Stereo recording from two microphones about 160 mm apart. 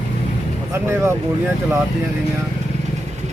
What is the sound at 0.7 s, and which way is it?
Speech, 15° right (ahead or behind).